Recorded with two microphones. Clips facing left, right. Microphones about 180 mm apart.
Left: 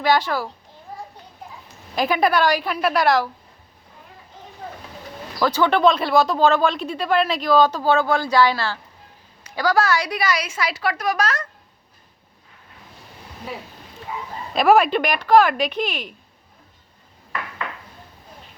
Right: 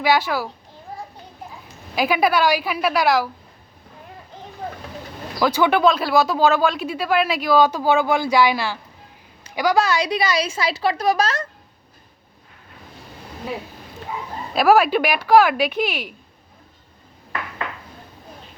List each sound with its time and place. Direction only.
0.0 s speech: 10° right (ahead or behind)
2.0 s a woman's voice: 5° right (ahead or behind)
5.4 s speech: 10° right (ahead or behind); by 11.4 s 25° right (ahead or behind)
14.5 s speech: centre (ahead or behind)